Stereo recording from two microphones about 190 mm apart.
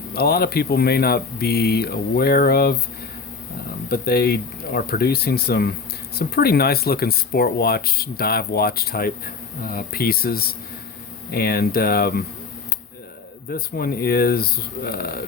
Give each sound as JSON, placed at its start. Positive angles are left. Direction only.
{"t": 0.1, "sound": "speech", "side_deg": 55}
{"t": 3.8, "sound": "speech", "side_deg": 55}
{"t": 13.5, "sound": "speech", "side_deg": 50}